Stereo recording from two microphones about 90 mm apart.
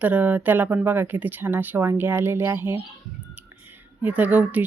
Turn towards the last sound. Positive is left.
turn(degrees=-15)  # may be behind; listen again after turning